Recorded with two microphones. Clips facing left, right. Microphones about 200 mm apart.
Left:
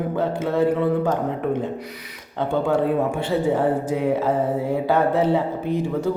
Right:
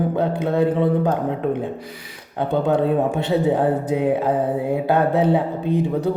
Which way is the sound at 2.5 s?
20° right (ahead or behind).